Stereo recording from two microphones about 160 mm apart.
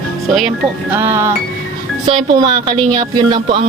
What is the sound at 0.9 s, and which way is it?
Music, 15° right (ahead or behind).